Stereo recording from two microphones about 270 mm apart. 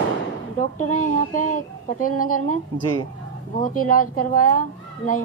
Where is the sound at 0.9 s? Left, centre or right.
Left.